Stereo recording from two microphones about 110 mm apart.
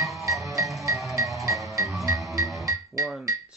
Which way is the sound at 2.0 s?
30° right (ahead or behind).